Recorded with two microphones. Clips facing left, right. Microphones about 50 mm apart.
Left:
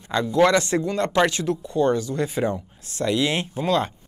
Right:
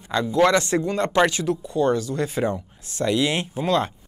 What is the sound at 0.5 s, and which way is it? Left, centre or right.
Speech, right.